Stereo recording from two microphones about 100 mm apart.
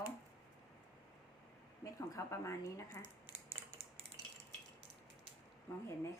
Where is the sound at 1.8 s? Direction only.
30° left (ahead or behind).